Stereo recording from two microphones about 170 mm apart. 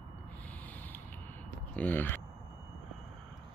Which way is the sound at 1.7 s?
10° left (ahead or behind).